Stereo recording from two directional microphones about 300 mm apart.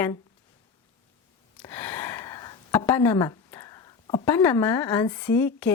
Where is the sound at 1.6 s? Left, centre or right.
Centre.